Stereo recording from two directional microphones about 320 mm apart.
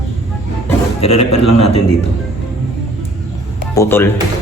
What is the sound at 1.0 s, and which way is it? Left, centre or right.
Speech, left.